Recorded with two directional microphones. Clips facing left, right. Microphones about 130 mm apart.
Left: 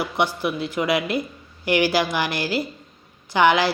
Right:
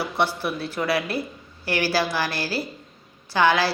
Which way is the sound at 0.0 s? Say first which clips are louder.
Left 1 dB; 15° left (ahead or behind).